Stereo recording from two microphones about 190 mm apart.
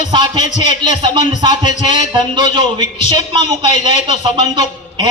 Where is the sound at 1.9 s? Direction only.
20° right (ahead or behind).